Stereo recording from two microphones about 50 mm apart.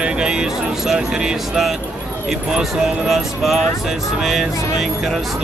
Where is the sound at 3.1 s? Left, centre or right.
Centre.